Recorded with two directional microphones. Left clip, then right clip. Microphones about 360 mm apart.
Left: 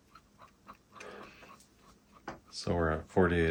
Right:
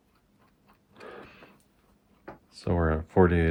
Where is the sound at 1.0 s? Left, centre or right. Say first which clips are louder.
Right 4 dB; right.